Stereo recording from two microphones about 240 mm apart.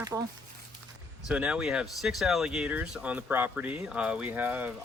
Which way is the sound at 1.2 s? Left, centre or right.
Centre.